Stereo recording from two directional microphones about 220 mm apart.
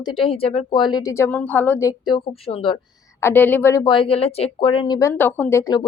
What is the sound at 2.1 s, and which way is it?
Speech, 25° left (ahead or behind).